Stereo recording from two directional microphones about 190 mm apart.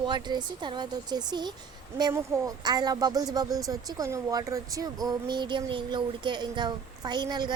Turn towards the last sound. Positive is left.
turn(degrees=-20)  # may be behind; listen again after turning